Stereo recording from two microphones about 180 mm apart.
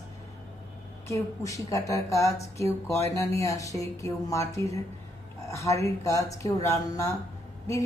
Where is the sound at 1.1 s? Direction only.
20° left (ahead or behind).